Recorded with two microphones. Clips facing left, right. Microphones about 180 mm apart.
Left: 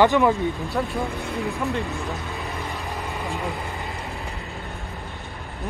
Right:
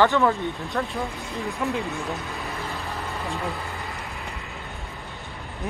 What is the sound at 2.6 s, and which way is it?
Vehicle, 15° left (ahead or behind).